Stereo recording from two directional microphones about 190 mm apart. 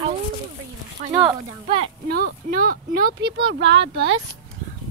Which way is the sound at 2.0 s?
55° right (ahead or behind).